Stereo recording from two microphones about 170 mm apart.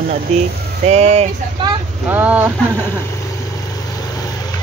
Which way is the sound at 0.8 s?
40° right (ahead or behind).